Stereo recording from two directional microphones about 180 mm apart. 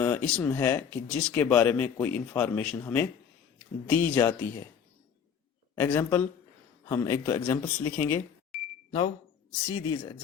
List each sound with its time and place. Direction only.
0.0 s speech: 15° left (ahead or behind)
5.7 s speech: 15° left (ahead or behind)
8.9 s speech: 30° left (ahead or behind)
9.5 s speech: 15° left (ahead or behind)